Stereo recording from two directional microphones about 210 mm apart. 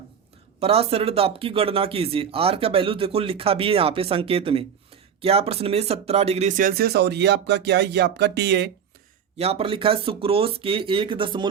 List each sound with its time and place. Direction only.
0.6 s speech: 30° right (ahead or behind); by 8.7 s 50° right (ahead or behind)
9.4 s speech: 30° right (ahead or behind)